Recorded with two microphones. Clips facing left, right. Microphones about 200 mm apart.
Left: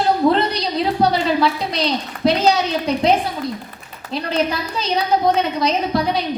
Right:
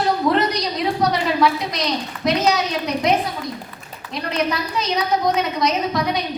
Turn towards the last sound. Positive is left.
turn(degrees=30)  # may be behind; listen again after turning